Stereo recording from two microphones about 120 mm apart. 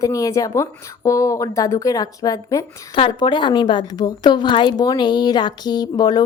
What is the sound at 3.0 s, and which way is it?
Speech, 45° left (ahead or behind).